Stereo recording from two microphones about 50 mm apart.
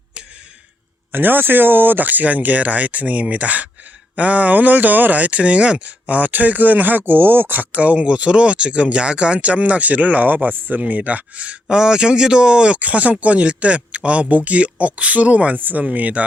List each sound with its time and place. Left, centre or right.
1.1 s speech: right